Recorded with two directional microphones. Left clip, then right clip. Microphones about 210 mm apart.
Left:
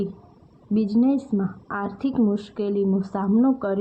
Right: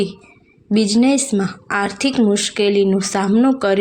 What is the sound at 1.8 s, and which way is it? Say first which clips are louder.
Speech: right 8 dB; 20° right (ahead or behind).